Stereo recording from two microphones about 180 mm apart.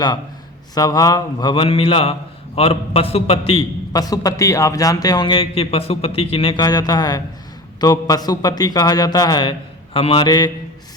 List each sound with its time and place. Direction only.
0.7 s a man's voice: 20° left (ahead or behind)